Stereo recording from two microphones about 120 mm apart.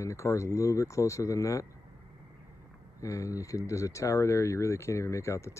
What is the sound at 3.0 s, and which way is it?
Speech, 25° left (ahead or behind).